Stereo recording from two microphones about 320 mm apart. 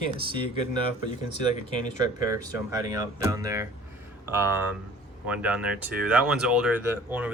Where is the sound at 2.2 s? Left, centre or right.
Centre.